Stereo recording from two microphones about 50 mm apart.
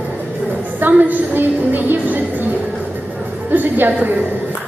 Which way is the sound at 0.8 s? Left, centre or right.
Right.